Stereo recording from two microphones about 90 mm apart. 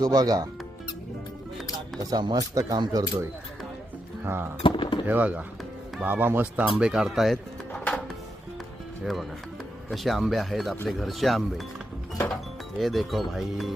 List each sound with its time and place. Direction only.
0.0 s speech: 50° right (ahead or behind)
2.0 s speech: 45° right (ahead or behind)
4.2 s speech: 25° right (ahead or behind)
4.6 s a sound: 70° left (ahead or behind)
5.0 s speech: 20° right (ahead or behind); by 7.3 s 5° right (ahead or behind)
7.7 s music: 15° left (ahead or behind)
9.9 s speech: centre (ahead or behind)
12.8 s speech: centre (ahead or behind)